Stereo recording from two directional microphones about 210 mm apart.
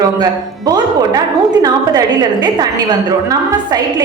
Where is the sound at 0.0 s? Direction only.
15° right (ahead or behind).